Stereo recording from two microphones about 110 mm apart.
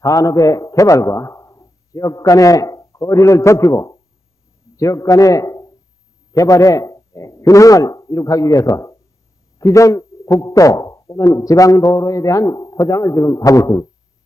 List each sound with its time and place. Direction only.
0.0 s a man's voice: 30° left (ahead or behind)